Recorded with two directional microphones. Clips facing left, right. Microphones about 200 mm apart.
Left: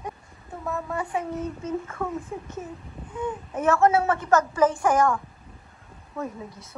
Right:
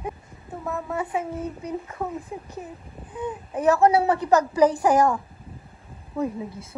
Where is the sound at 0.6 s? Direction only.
5° right (ahead or behind).